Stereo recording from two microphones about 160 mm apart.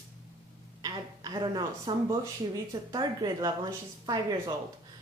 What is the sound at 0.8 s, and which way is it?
A woman's voice, 25° right (ahead or behind).